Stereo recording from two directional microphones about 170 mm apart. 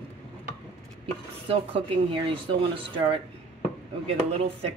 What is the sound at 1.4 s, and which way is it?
Speech, 30° right (ahead or behind).